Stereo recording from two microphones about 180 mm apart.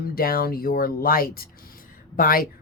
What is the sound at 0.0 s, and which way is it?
Speech, 55° left (ahead or behind).